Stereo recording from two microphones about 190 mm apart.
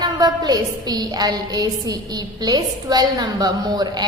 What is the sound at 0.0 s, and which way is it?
A woman's voice, 20° right (ahead or behind).